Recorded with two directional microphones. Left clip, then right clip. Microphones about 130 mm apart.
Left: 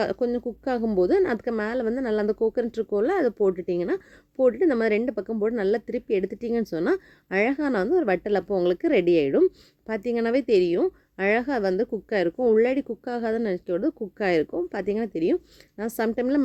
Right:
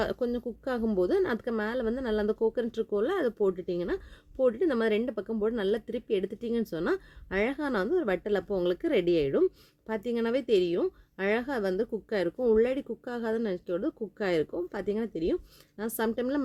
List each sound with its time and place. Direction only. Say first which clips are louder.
0.0 s speech: left 5 dB; 25° left (ahead or behind)